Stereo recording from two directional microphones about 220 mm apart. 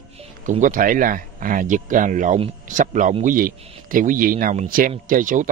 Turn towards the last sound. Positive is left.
turn(degrees=-35)  # may be behind; listen again after turning